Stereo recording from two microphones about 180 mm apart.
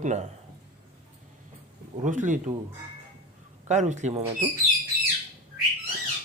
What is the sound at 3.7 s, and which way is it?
Speech, 40° right (ahead or behind).